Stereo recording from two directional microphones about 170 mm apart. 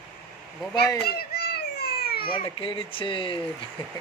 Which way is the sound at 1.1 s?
65° left (ahead or behind).